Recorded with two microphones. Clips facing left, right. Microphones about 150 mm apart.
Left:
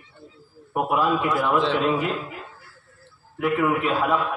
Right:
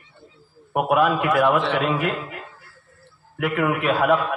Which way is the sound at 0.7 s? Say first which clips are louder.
Right 3 dB; 70° right (ahead or behind).